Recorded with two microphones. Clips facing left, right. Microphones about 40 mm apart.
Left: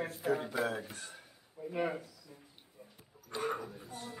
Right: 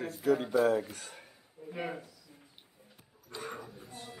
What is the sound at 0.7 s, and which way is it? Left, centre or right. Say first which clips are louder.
Speech: right 9 dB; right.